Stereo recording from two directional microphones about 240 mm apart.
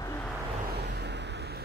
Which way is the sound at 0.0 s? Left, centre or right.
Centre.